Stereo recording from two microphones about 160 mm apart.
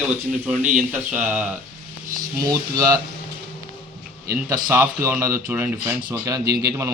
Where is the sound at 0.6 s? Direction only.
10° right (ahead or behind).